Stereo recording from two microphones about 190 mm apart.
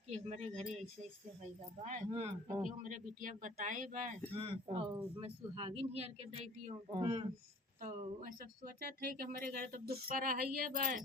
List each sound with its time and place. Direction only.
0.1 s speech: 35° right (ahead or behind)
1.8 s a man's voice: 35° right (ahead or behind)
4.4 s speech: 30° right (ahead or behind)
7.8 s a man's voice: 45° right (ahead or behind)